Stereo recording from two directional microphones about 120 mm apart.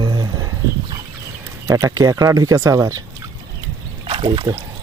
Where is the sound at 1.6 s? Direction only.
25° right (ahead or behind).